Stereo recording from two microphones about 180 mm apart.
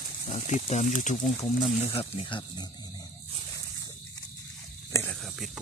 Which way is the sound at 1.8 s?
30° left (ahead or behind).